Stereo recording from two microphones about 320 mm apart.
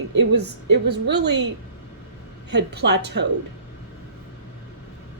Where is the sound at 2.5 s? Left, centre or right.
Right.